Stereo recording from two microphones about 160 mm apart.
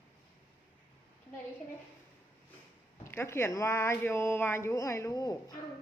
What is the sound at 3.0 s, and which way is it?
Speech, 15° left (ahead or behind).